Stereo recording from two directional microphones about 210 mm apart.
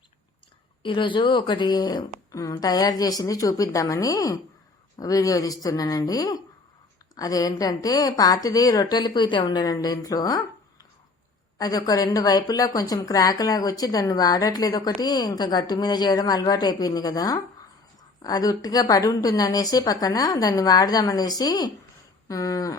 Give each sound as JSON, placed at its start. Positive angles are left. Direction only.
{"t": 0.8, "sound": "a woman's voice", "side_deg": 25}